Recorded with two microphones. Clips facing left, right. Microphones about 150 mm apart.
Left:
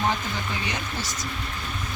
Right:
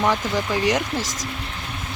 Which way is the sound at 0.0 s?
90° right.